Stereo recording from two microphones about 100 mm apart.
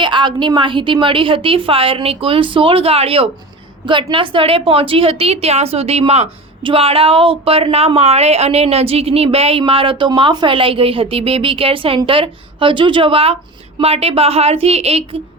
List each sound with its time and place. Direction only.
0.0 s a woman's voice: 50° right (ahead or behind); by 3.2 s 75° right (ahead or behind)
3.8 s a woman's voice: 55° right (ahead or behind)
13.8 s a woman's voice: 90° right